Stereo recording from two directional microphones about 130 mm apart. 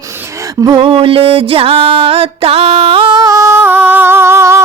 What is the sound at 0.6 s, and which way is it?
Music, 40° right (ahead or behind).